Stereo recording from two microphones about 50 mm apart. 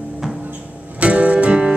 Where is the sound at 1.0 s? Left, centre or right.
Right.